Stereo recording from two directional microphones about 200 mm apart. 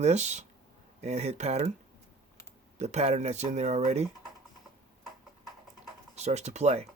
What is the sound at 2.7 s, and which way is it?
Speech, 35° right (ahead or behind).